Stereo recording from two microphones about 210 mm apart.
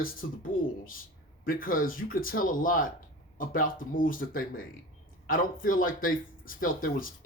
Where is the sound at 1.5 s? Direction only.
40° left (ahead or behind).